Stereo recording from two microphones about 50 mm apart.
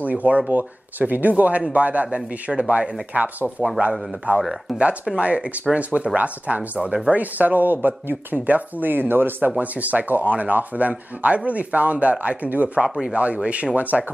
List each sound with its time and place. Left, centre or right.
0.0 s speech: right
3.4 s a man's voice: centre
4.3 s speech: right
9.6 s speech: right
12.8 s a man's voice: centre
13.1 s speech: right